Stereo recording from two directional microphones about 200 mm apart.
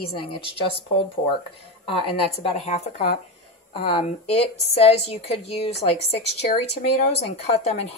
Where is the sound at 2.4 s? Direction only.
35° left (ahead or behind).